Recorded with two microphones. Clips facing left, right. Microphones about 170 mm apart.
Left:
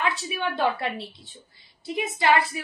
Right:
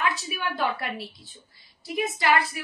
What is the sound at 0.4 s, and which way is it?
Speech, 25° left (ahead or behind).